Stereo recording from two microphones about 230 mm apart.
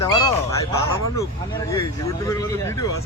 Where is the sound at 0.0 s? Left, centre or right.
Centre.